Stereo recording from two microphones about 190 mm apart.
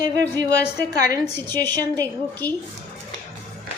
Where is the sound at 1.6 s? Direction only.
10° left (ahead or behind).